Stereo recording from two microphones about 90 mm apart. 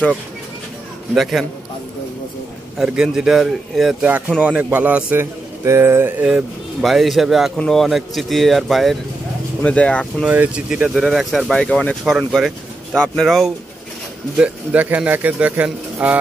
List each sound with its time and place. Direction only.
1.1 s speech: centre (ahead or behind)
2.8 s speech: 10° right (ahead or behind)
4.4 s a man's voice: 15° right (ahead or behind)
6.2 s speech: 5° right (ahead or behind)
9.6 s speech: 15° left (ahead or behind)
10.3 s speech: 15° right (ahead or behind); by 13.5 s centre (ahead or behind)
14.3 s speech: 15° right (ahead or behind)